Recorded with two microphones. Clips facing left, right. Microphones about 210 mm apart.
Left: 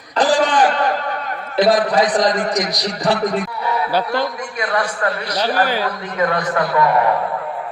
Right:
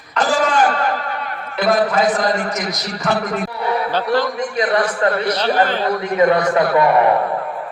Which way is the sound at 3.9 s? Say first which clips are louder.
Right 3 dB; 10° left (ahead or behind).